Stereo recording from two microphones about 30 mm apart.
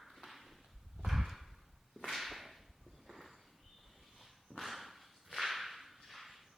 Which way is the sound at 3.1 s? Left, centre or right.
Centre.